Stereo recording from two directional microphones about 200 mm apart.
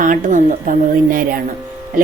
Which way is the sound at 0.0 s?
40° right (ahead or behind).